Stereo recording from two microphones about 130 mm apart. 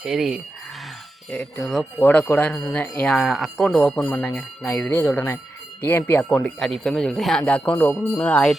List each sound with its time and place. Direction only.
0.0 s speech: 5° right (ahead or behind)
1.3 s speech: 5° left (ahead or behind)
4.1 s speech: 20° left (ahead or behind)